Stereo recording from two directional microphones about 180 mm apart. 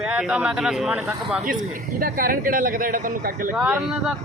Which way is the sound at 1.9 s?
50° right (ahead or behind).